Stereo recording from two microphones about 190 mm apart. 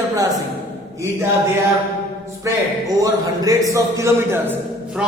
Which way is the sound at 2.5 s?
15° right (ahead or behind).